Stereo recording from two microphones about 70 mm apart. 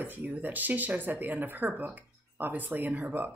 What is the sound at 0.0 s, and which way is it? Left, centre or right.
Speech, right.